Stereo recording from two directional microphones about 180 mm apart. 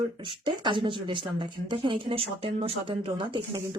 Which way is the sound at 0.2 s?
25° right (ahead or behind).